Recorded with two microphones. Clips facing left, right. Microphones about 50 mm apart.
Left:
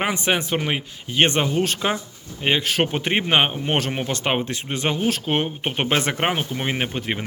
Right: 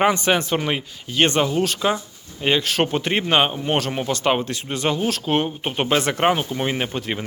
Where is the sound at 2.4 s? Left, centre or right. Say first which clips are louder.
Right 1 dB; left.